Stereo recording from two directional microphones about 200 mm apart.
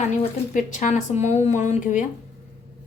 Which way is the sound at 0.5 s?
40° left (ahead or behind).